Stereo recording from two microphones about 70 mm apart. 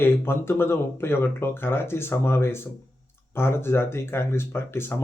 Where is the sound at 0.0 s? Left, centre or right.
Left.